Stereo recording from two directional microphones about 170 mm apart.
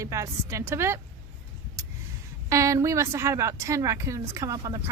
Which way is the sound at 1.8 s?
15° right (ahead or behind).